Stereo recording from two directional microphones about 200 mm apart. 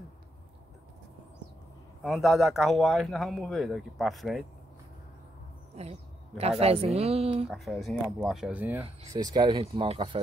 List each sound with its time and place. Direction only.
2.0 s speech: centre (ahead or behind)
5.8 s a sound: 30° right (ahead or behind)
6.6 s speech: 30° right (ahead or behind)
7.4 s speech: centre (ahead or behind)
9.1 s speech: 20° right (ahead or behind)